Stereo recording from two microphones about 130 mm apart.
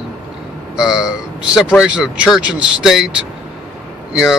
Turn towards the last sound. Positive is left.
turn(degrees=-5)  # may be behind; listen again after turning